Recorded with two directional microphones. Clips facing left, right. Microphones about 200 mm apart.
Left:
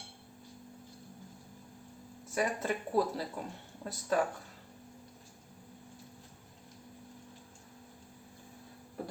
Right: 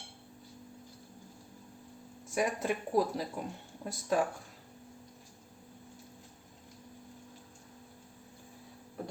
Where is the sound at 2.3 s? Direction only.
15° right (ahead or behind).